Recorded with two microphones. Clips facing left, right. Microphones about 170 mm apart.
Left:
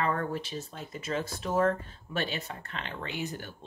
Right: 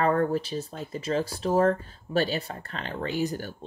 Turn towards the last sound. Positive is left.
turn(degrees=-40)  # may be behind; listen again after turning